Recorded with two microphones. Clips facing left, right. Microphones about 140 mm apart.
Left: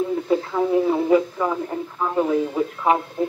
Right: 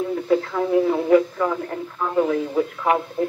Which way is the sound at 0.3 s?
15° left (ahead or behind).